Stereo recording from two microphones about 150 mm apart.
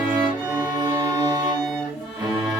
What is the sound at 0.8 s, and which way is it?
Music, 25° right (ahead or behind).